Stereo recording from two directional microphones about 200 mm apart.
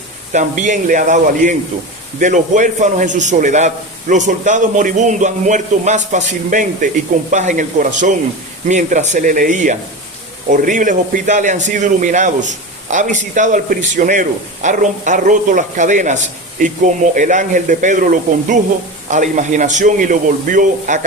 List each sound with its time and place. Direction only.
0.3 s a man's voice: 40° right (ahead or behind)